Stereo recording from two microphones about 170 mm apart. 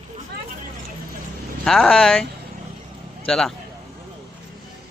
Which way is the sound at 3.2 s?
5° left (ahead or behind).